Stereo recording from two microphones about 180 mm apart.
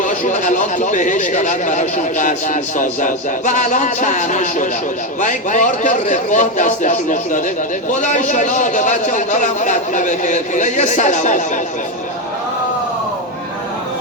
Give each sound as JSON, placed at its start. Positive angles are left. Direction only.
{"t": 0.0, "sound": "speech", "side_deg": 45}